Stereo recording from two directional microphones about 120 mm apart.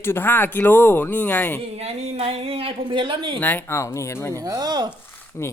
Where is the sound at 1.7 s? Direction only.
60° right (ahead or behind).